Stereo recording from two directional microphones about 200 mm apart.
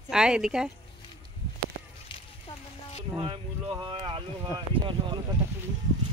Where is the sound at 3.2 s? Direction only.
25° right (ahead or behind).